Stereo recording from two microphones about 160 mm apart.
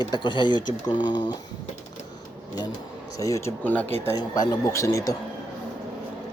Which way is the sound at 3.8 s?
40° right (ahead or behind).